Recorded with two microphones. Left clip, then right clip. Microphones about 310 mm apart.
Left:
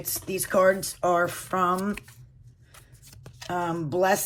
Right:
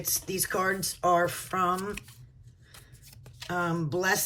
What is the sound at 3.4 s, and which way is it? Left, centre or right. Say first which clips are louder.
Speech: left 2 dB; centre.